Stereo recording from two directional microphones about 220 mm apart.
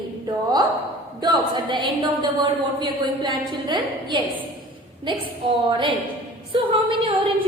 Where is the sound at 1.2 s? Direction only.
20° right (ahead or behind).